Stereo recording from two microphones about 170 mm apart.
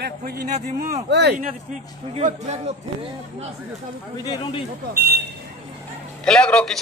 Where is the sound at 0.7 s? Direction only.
55° right (ahead or behind).